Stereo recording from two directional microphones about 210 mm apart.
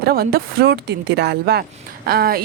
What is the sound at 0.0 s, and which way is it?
Speech, 45° right (ahead or behind).